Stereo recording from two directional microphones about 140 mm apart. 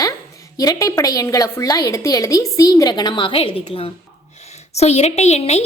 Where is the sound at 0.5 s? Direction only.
25° left (ahead or behind).